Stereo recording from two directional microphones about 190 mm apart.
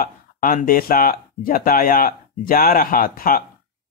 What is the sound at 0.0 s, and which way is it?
Speech, 45° left (ahead or behind).